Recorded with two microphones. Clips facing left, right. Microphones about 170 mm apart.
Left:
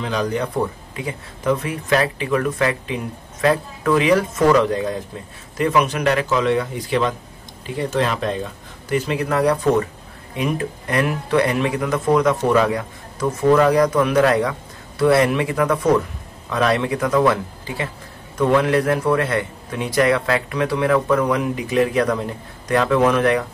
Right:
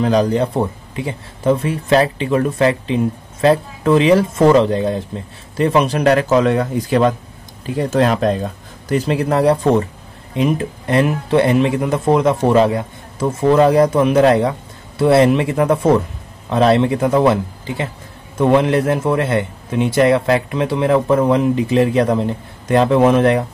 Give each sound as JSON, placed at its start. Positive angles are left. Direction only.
{"t": 0.0, "sound": "a man's voice", "side_deg": -35}